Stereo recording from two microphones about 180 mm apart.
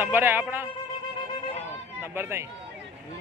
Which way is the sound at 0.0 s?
10° right (ahead or behind).